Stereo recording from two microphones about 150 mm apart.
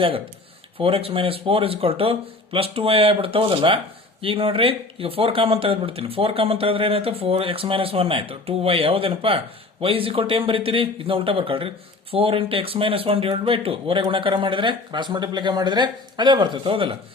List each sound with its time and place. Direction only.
0.8 s speech: 40° right (ahead or behind)